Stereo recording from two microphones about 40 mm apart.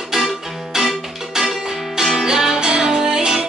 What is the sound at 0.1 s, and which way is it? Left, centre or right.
Music, centre.